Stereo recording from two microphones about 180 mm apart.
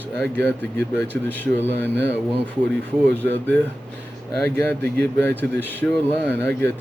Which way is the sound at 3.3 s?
10° left (ahead or behind).